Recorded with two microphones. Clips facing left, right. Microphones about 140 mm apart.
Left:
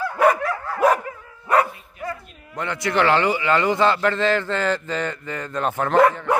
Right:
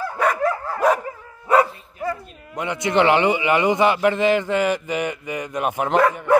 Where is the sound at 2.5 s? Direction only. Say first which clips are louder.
Right 3 dB; 15° right (ahead or behind).